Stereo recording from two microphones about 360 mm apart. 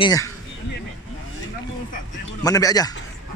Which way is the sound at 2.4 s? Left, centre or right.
Centre.